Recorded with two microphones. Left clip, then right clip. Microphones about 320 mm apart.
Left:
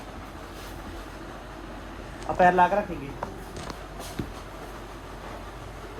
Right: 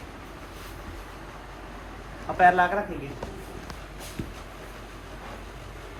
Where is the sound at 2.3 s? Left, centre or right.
Left.